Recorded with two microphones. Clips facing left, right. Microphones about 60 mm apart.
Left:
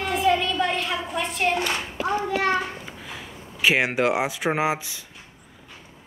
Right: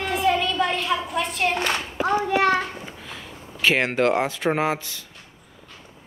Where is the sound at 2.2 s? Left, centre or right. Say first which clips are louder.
Right 3 dB; right.